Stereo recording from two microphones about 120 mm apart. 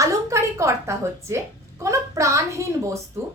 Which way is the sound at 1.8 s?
25° right (ahead or behind).